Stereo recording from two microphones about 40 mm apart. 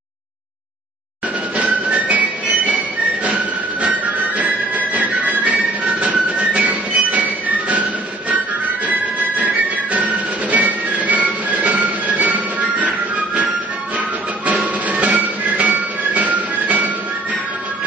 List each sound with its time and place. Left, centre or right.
1.6 s music: right
4.4 s music: right
6.5 s music: right
9.9 s music: right